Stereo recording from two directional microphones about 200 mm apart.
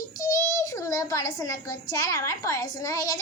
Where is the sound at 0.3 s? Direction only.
15° left (ahead or behind).